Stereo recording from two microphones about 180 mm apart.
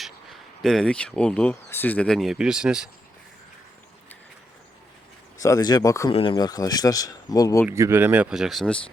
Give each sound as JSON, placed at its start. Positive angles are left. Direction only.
{"t": 0.0, "sound": "speech", "side_deg": 0}
{"t": 5.4, "sound": "speech", "side_deg": 20}
{"t": 6.1, "sound": "speech", "side_deg": 30}
{"t": 7.7, "sound": "speech", "side_deg": -15}